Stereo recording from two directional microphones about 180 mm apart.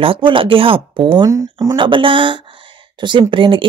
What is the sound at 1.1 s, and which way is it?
Speech, 15° right (ahead or behind).